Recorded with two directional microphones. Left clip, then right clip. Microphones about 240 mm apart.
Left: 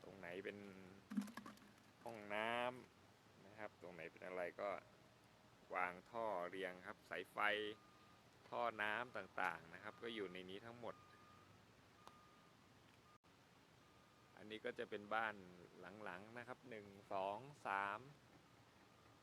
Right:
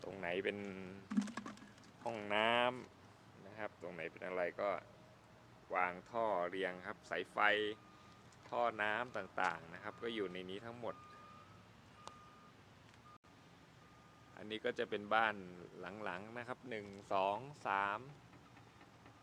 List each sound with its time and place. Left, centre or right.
0.2 s speech: right
1.1 s a sound: centre
2.0 s speech: centre
8.4 s speech: left
14.3 s speech: centre